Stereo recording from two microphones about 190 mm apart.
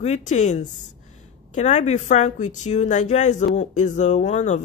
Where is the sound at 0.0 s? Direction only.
40° left (ahead or behind).